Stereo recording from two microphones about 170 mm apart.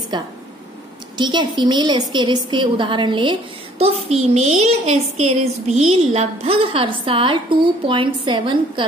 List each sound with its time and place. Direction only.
0.1 s a woman's voice: 25° right (ahead or behind)